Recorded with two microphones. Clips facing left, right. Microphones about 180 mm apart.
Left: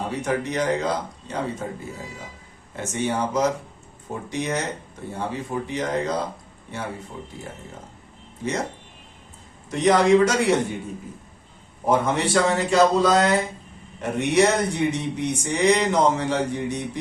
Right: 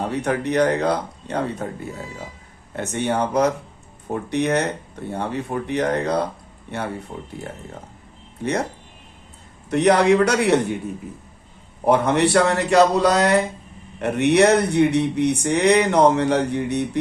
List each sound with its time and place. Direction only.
0.2 s speech: 60° right (ahead or behind)
2.7 s speech: 60° right (ahead or behind)
9.6 s speech: 65° right (ahead or behind)
11.9 s speech: 65° right (ahead or behind)